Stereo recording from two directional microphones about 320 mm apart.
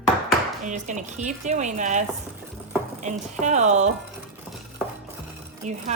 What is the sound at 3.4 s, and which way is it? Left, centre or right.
Speech, right.